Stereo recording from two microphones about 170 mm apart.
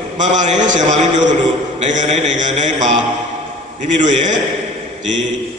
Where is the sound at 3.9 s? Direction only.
45° right (ahead or behind).